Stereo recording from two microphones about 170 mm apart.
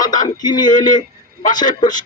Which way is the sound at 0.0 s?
25° left (ahead or behind).